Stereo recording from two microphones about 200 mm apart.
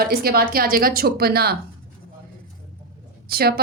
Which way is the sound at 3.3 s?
50° right (ahead or behind).